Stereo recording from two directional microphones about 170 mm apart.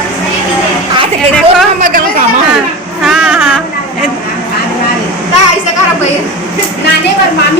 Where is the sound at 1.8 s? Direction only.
55° right (ahead or behind).